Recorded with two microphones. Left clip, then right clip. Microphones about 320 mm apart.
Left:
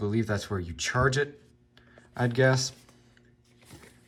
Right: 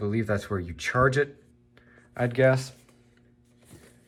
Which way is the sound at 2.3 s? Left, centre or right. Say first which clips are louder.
Right 2 dB; centre.